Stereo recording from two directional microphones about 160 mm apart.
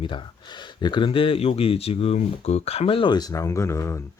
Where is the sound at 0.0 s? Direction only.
30° left (ahead or behind).